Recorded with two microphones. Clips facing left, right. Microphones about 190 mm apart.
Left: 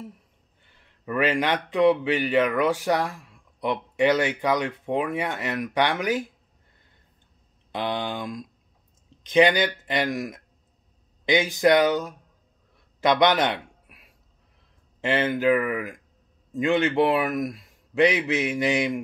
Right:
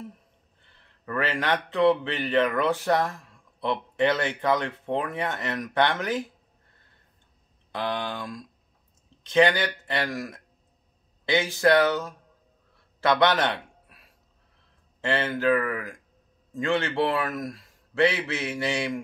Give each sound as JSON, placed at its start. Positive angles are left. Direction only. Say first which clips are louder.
{"t": 1.0, "sound": "a man's voice", "louder": "left 4 dB", "side_deg": 15}
{"t": 7.7, "sound": "a man's voice", "louder": "left 2 dB", "side_deg": 20}